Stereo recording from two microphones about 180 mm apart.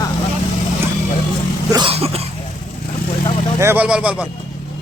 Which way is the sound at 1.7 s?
30° right (ahead or behind).